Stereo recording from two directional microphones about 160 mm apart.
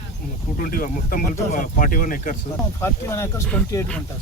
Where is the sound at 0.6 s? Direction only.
60° left (ahead or behind).